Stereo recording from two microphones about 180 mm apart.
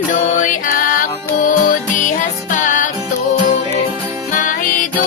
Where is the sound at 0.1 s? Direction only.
45° left (ahead or behind).